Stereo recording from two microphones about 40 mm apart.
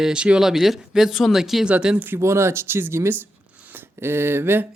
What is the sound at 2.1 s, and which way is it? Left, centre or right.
Speech, right.